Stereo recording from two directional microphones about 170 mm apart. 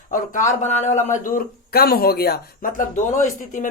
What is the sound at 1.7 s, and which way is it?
Speech, 65° left (ahead or behind).